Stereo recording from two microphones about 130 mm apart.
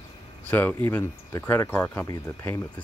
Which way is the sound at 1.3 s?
20° left (ahead or behind).